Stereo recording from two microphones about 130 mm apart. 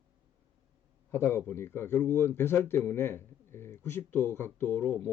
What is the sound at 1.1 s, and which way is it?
A man's voice, 20° left (ahead or behind).